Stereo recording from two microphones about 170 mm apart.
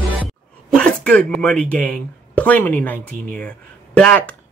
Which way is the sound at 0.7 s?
5° left (ahead or behind).